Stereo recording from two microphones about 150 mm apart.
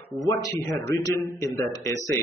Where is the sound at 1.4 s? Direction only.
20° left (ahead or behind).